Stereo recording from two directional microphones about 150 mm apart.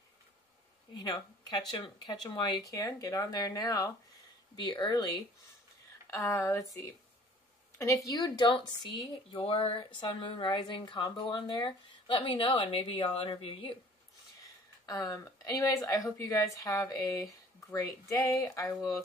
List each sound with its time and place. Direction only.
0.9 s a woman's voice: 25° left (ahead or behind)
7.7 s a woman's voice: 20° left (ahead or behind); by 13.7 s 35° left (ahead or behind)
14.9 s a woman's voice: 25° left (ahead or behind)